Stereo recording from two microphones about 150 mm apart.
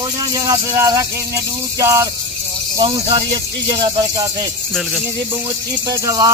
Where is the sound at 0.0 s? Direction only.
25° right (ahead or behind).